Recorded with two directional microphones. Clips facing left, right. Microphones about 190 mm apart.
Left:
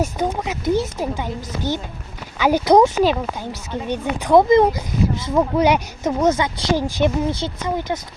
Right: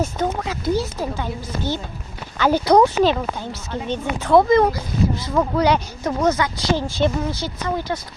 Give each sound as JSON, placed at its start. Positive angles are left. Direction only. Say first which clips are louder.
{"t": 0.0, "sound": "speech", "louder": "left 1 dB", "side_deg": 15}